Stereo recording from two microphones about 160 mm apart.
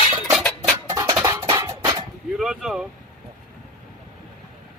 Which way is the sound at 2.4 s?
5° right (ahead or behind).